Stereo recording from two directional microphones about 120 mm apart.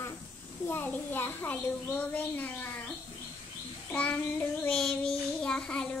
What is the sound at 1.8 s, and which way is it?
Speech, 15° left (ahead or behind).